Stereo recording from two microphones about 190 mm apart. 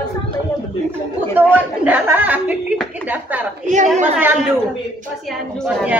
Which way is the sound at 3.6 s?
40° right (ahead or behind).